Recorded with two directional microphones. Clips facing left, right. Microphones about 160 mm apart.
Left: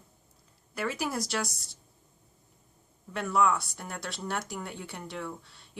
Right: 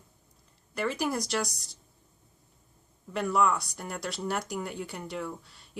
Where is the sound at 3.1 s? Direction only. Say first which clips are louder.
Even; centre (ahead or behind).